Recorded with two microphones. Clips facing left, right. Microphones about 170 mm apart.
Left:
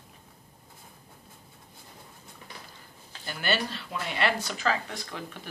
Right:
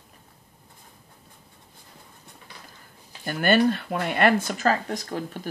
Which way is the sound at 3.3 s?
50° right (ahead or behind).